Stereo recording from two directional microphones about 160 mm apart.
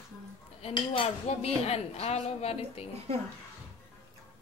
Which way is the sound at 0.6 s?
35° left (ahead or behind).